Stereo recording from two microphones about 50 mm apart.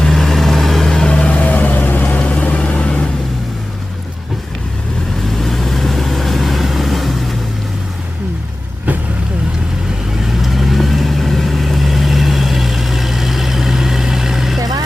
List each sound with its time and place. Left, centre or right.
0.0 s vehicle: centre
1.0 s vehicle: left
5.4 s vehicle: centre
10.2 s vehicle: centre